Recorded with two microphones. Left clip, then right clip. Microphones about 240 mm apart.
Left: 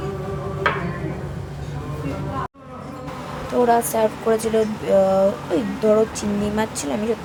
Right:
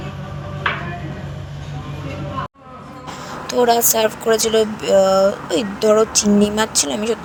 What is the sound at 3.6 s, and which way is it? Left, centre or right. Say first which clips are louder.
Speech: right 3 dB; right.